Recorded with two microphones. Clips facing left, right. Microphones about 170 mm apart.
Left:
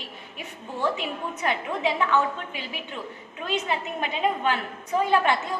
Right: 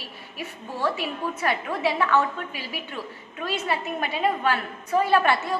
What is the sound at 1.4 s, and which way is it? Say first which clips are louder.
A woman's voice: even; 20° left (ahead or behind).